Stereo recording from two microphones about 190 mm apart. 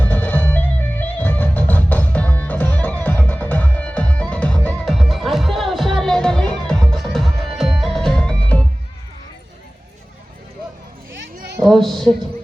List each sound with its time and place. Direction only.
0.0 s music: 10° left (ahead or behind)
11.2 s a sound: 65° right (ahead or behind)
11.6 s music: centre (ahead or behind)